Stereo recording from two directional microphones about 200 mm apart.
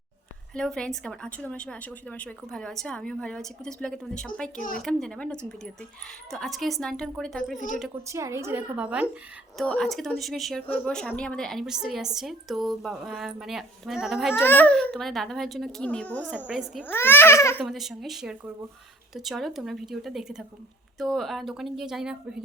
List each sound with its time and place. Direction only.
0.5 s a woman's voice: 5° left (ahead or behind)
4.5 s speech: 45° left (ahead or behind)
4.8 s a woman's voice: centre (ahead or behind)
8.0 s a woman's voice: 15° right (ahead or behind)
9.6 s a woman's voice: 5° left (ahead or behind)
14.3 s a woman's voice: 10° left (ahead or behind)
16.8 s speech: 10° left (ahead or behind)
17.6 s a woman's voice: centre (ahead or behind)